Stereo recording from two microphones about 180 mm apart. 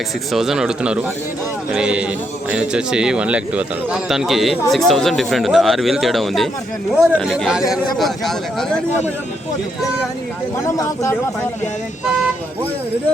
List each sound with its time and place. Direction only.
0.3 s a man's voice: centre (ahead or behind)
10.7 s speech: 20° left (ahead or behind)